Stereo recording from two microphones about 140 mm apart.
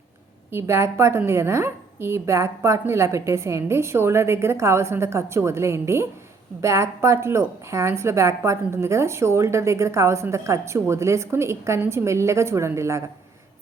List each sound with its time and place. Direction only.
0.5 s a woman's voice: 20° right (ahead or behind)